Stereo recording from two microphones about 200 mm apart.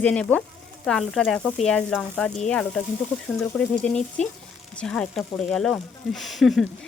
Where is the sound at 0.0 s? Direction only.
5° left (ahead or behind).